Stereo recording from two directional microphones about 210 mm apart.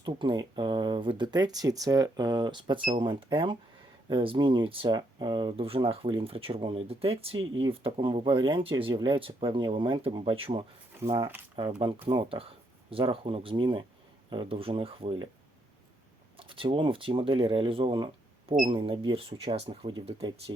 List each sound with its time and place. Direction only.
0.0 s speech: 20° right (ahead or behind)
16.4 s speech: 25° right (ahead or behind)